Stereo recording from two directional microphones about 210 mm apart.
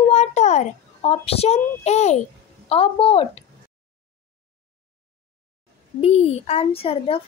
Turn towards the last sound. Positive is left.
turn(degrees=25)  # may be behind; listen again after turning